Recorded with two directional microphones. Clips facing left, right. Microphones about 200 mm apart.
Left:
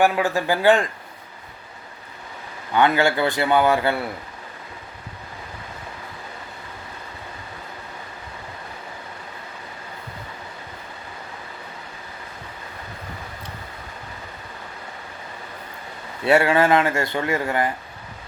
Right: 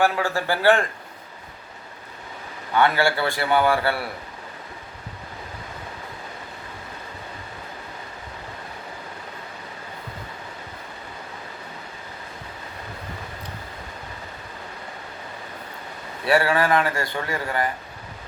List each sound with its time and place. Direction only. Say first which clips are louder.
0.0 s speech: left 3 dB; 15° left (ahead or behind)
2.7 s speech: left 2 dB; 15° left (ahead or behind)
16.2 s speech: left 3 dB; 25° left (ahead or behind)